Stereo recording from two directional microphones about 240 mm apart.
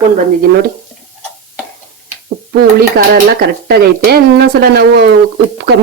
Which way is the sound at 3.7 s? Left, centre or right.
Right.